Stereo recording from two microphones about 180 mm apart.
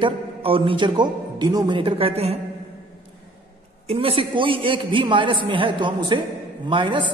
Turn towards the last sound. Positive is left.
turn(degrees=-25)  # may be behind; listen again after turning